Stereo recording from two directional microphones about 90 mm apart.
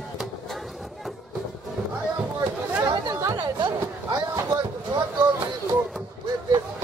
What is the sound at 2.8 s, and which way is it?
Chatter, 50° right (ahead or behind).